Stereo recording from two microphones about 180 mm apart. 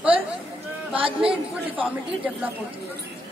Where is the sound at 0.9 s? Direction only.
30° right (ahead or behind).